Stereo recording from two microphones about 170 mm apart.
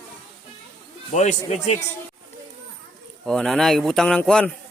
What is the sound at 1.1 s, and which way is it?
Speech, 45° left (ahead or behind).